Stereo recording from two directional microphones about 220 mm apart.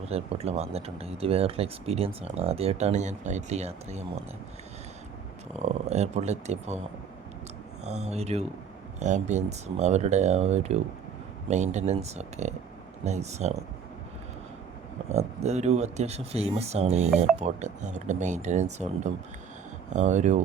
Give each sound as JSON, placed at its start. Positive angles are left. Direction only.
{"t": 0.0, "sound": "speech", "side_deg": -25}
{"t": 5.6, "sound": "speech", "side_deg": -30}
{"t": 7.9, "sound": "speech", "side_deg": -30}
{"t": 15.1, "sound": "speech", "side_deg": -30}